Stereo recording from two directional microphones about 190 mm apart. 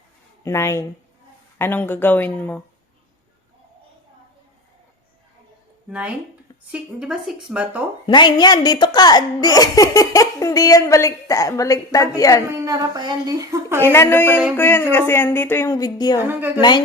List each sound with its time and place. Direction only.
0.4 s speech: 15° left (ahead or behind)
6.7 s a woman's voice: 5° right (ahead or behind)
8.0 s speech: 25° left (ahead or behind)
12.5 s a woman's voice: 15° right (ahead or behind)
13.8 s speech: 15° left (ahead or behind)
16.1 s a woman's voice: 10° right (ahead or behind)
16.6 s speech: 25° left (ahead or behind)